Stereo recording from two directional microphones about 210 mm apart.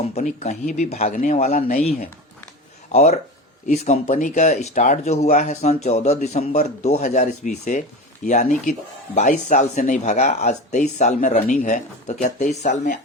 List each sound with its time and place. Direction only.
0.1 s a man's voice: 35° left (ahead or behind)
2.9 s a man's voice: 30° left (ahead or behind)